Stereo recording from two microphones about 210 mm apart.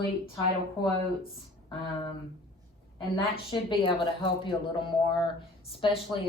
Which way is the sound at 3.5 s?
25° left (ahead or behind).